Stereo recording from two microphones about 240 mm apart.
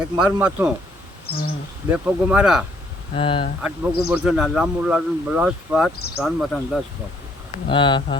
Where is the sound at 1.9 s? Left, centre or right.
Centre.